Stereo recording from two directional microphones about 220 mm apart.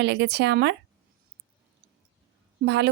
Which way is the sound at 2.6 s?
50° right (ahead or behind).